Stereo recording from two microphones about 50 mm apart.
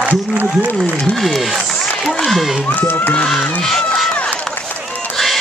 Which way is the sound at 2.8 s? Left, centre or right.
Left.